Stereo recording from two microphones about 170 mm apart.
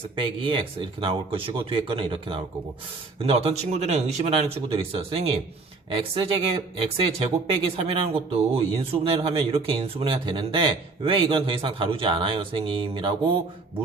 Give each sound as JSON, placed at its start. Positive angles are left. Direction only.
{"t": 0.2, "sound": "speech", "side_deg": -30}